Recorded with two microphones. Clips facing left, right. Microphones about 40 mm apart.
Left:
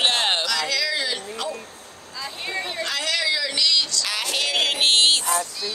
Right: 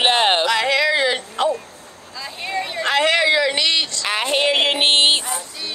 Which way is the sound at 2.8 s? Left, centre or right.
Right.